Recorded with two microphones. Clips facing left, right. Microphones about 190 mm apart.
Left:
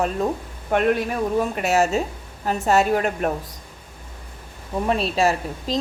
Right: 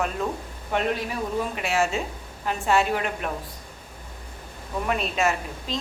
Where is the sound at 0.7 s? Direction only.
50° left (ahead or behind).